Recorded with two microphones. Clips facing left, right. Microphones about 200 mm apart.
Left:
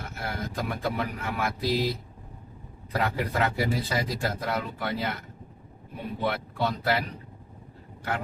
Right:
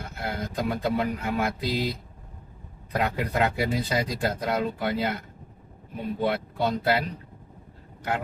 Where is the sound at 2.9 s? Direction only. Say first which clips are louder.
Right 1 dB; 20° right (ahead or behind).